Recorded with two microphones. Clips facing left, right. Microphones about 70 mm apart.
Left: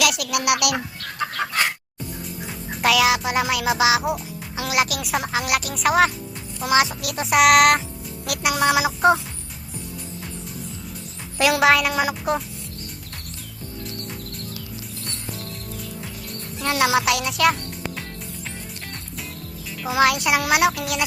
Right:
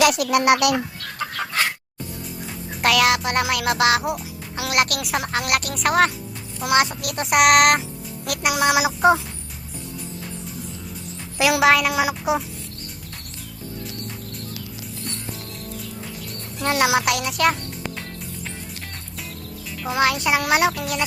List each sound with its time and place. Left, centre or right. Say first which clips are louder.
0.0 s speech: right 5 dB; right
2.8 s music: even; centre
11.3 s music: even; centre
16.6 s a woman's voice: right 1 dB; centre
17.0 s music: left 1 dB; centre
19.8 s music: left 2 dB; centre